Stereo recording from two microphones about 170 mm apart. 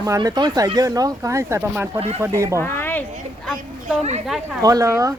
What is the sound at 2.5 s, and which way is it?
Speech, 15° left (ahead or behind).